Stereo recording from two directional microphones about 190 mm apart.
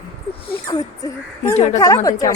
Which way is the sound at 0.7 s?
20° left (ahead or behind).